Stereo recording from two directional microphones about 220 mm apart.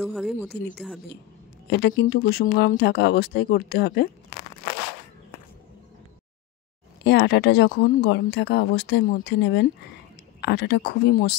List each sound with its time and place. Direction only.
0.0 s speech: centre (ahead or behind)
1.7 s speech: 55° left (ahead or behind)
7.0 s speech: 50° left (ahead or behind)